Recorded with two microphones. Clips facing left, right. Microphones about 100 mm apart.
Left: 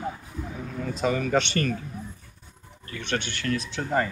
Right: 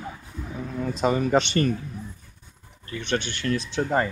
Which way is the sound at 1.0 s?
25° right (ahead or behind).